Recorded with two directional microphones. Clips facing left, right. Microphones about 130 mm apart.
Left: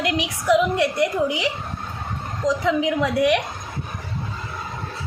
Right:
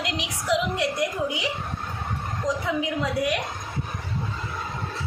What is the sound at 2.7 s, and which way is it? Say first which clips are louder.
Speech: left 6 dB; 85° left.